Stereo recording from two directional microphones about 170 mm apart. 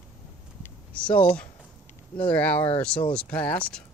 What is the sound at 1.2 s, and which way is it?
Speech, 5° left (ahead or behind).